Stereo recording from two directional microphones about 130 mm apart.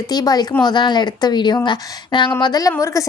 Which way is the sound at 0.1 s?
30° left (ahead or behind).